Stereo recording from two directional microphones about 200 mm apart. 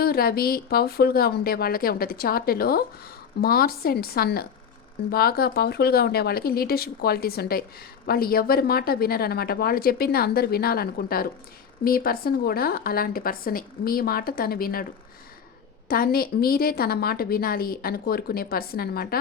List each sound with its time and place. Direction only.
0.0 s a woman's voice: 50° left (ahead or behind)
15.9 s a woman's voice: 50° left (ahead or behind)